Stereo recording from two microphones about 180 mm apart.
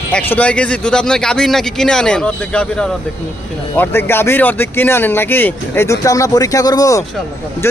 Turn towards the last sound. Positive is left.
turn(degrees=20)  # may be behind; listen again after turning